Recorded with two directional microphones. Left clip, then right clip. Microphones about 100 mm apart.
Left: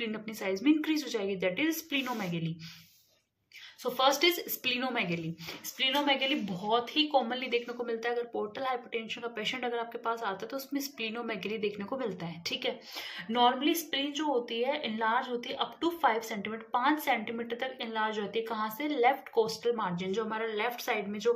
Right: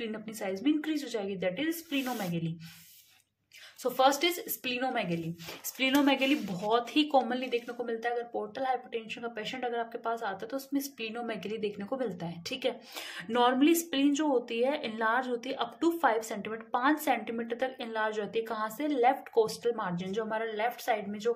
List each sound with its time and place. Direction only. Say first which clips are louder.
0.0 s speech: left 1 dB; 25° right (ahead or behind)
3.8 s a woman's voice: even; 40° right (ahead or behind)
5.8 s speech: right 1 dB; 55° right (ahead or behind)
7.2 s a woman's voice: even; 40° right (ahead or behind)
7.6 s speech: even; 25° right (ahead or behind)
12.9 s a woman's voice: right 1 dB; 65° right (ahead or behind); by 21.3 s 25° right (ahead or behind)